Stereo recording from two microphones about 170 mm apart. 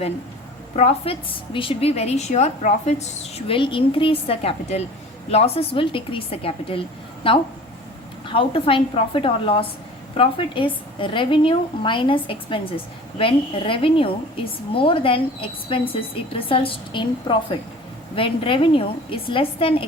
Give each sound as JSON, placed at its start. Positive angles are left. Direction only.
{"t": 0.8, "sound": "a woman's voice", "side_deg": 35}